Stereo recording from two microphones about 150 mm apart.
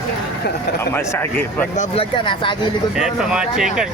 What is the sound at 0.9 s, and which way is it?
Speech, 15° left (ahead or behind).